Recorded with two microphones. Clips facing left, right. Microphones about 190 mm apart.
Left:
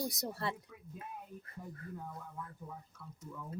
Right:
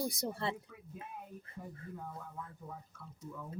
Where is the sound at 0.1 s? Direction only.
30° right (ahead or behind).